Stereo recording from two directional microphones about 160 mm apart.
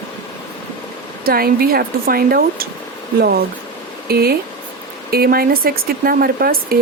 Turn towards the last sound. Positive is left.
turn(degrees=-70)  # may be behind; listen again after turning